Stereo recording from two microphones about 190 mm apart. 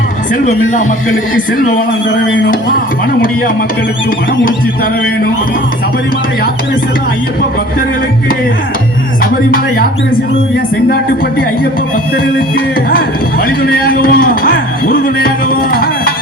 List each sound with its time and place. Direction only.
0.4 s a man's voice: 40° left (ahead or behind)
2.2 s music: 80° left
12.1 s a man's voice: 50° left (ahead or behind)